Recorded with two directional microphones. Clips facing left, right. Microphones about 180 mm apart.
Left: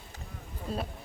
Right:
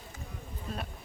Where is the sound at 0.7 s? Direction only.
30° left (ahead or behind).